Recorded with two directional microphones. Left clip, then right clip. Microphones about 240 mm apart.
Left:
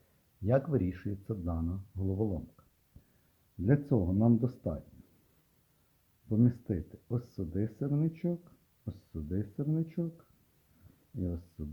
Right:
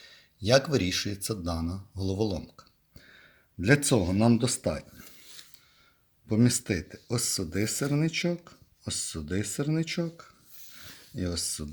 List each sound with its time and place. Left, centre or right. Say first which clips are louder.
0.4 s speech: right 7 dB; centre
3.7 s speech: right 7 dB; centre
6.2 s speech: right 5 dB; centre